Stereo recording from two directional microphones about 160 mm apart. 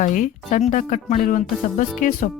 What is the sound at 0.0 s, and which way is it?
Speech, 55° left (ahead or behind).